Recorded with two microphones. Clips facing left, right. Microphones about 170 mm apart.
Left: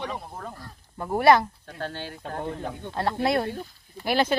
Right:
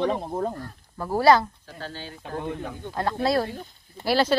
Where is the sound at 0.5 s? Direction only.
15° left (ahead or behind).